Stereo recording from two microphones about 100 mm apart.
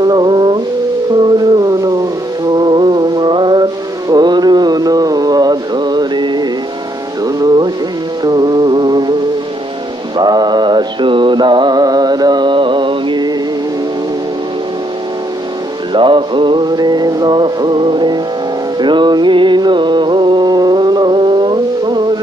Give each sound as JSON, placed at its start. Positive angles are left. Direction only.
{"t": 0.0, "sound": "music", "side_deg": -45}
{"t": 1.2, "sound": "a sound", "side_deg": -45}
{"t": 2.5, "sound": "music", "side_deg": -45}
{"t": 4.1, "sound": "mantra", "side_deg": -45}
{"t": 7.2, "sound": "music", "side_deg": -40}
{"t": 10.1, "sound": "music", "side_deg": -45}
{"t": 15.9, "sound": "music", "side_deg": -55}